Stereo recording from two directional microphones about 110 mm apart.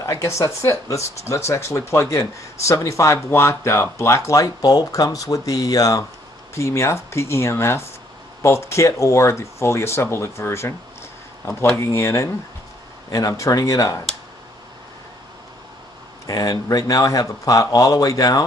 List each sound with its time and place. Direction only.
0.0 s speech: 25° left (ahead or behind)
11.7 s speech: 25° left (ahead or behind)
16.3 s speech: 35° left (ahead or behind)